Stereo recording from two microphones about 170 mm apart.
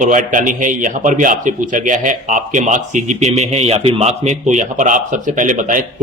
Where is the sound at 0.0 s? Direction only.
50° right (ahead or behind).